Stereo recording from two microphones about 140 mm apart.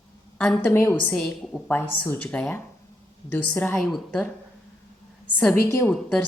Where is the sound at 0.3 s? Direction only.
10° left (ahead or behind).